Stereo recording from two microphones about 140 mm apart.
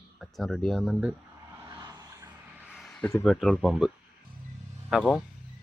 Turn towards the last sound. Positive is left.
turn(degrees=5)  # may be behind; listen again after turning